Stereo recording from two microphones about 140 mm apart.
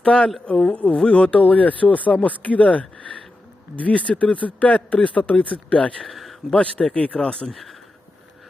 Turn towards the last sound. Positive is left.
turn(degrees=0)  # may be behind; listen again after turning